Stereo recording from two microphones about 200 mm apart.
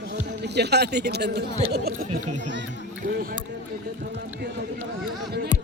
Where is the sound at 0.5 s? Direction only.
55° right (ahead or behind).